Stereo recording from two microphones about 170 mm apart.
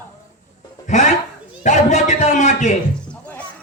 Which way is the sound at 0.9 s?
45° left (ahead or behind).